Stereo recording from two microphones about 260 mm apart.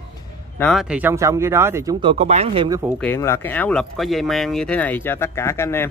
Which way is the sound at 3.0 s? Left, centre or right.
Centre.